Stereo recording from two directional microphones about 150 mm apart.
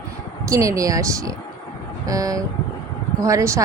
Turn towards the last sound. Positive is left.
turn(degrees=-20)  # may be behind; listen again after turning